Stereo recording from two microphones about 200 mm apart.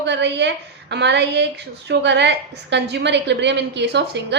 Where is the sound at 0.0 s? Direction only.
60° right (ahead or behind).